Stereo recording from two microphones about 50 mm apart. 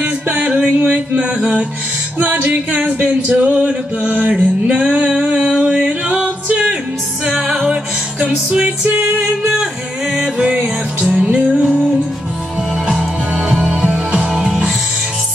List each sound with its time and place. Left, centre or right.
0.0 s music: right
2.1 s music: right
6.0 s music: right
7.7 s music: right
10.1 s music: centre
13.3 s music: centre